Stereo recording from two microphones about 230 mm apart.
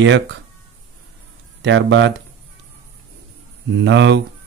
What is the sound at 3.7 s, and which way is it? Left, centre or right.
Speech, right.